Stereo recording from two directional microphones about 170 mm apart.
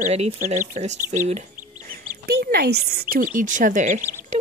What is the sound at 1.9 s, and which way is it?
Speech, 60° right (ahead or behind).